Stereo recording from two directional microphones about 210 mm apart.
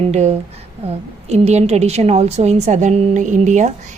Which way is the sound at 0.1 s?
30° right (ahead or behind).